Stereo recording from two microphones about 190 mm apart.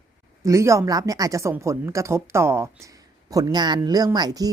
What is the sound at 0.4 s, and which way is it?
Speech, 15° right (ahead or behind).